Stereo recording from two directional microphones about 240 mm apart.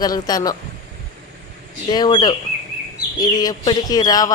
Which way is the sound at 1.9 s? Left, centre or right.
Centre.